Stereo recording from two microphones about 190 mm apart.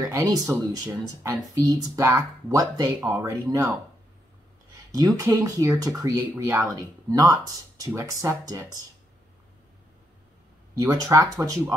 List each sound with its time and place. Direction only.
0.1 s speech: 15° right (ahead or behind)
4.9 s speech: 20° right (ahead or behind)
10.8 s speech: 20° right (ahead or behind)